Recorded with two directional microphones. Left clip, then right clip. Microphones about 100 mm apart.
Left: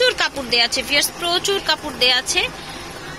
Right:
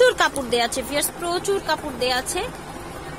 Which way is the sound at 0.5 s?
30° right (ahead or behind).